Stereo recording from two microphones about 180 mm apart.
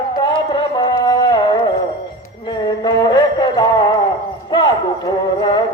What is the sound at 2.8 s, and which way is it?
Music, 25° left (ahead or behind).